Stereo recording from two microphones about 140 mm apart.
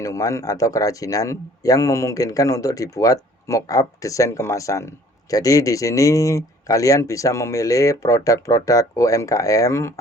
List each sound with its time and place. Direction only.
0.0 s a man's voice: 20° left (ahead or behind)